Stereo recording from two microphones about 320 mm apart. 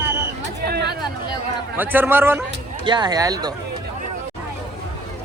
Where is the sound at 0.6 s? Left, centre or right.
Right.